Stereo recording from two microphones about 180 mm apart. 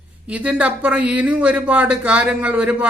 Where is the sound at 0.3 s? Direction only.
5° right (ahead or behind).